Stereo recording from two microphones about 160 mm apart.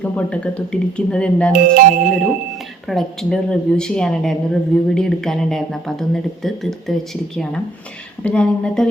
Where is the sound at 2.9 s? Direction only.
Centre (ahead or behind).